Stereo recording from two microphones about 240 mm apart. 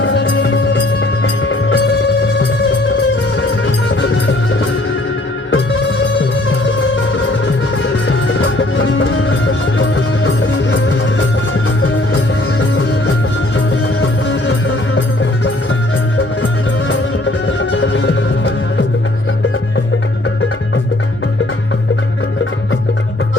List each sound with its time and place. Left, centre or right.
0.0 s music: left
3.3 s music: left
7.4 s music: left
12.5 s music: left
17.4 s music: left